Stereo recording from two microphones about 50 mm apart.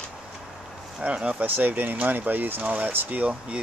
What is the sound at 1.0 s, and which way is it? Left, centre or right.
Speech, right.